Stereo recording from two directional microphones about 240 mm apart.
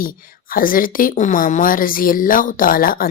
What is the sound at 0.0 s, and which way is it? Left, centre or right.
A woman's voice, left.